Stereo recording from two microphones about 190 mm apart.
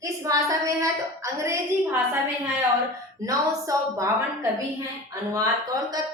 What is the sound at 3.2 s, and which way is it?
Speech, 15° right (ahead or behind).